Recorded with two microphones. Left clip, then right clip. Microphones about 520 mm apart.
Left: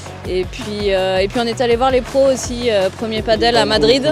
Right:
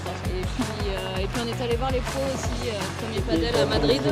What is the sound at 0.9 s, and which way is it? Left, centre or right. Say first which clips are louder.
Speech: left 14 dB; left.